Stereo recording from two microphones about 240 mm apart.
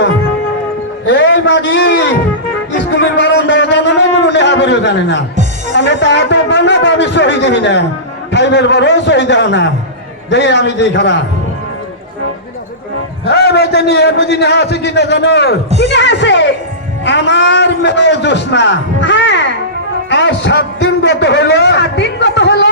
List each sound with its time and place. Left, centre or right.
1.0 s a sound: left
5.7 s a man's voice: left
13.2 s a man's voice: left